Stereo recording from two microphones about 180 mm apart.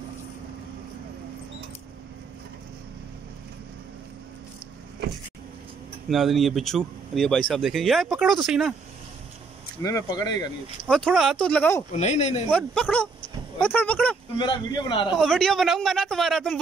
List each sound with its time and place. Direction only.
6.0 s speech: centre (ahead or behind)
9.8 s a man's voice: 20° left (ahead or behind)
10.9 s speech: 5° left (ahead or behind)
12.0 s speech: 40° left (ahead or behind)
12.4 s speech: 5° left (ahead or behind)
14.4 s a man's voice: 25° left (ahead or behind)
15.1 s speech: centre (ahead or behind)